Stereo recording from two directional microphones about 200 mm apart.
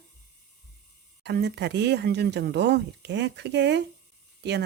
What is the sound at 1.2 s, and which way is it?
Speech, 55° right (ahead or behind).